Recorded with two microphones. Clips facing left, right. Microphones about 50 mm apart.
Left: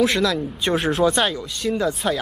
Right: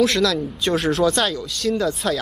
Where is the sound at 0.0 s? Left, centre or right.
Centre.